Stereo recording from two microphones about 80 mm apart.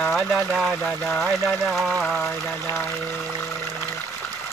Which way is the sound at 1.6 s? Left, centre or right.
Centre.